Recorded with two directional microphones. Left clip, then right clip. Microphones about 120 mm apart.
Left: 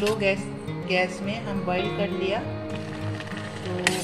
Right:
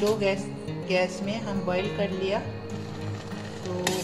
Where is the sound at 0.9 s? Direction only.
Centre (ahead or behind).